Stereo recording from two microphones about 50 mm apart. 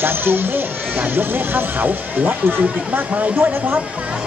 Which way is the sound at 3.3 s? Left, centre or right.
Right.